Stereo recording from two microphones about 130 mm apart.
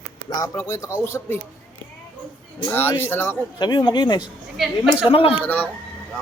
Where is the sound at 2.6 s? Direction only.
15° left (ahead or behind).